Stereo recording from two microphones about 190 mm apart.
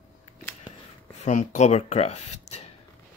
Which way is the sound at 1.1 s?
40° left (ahead or behind).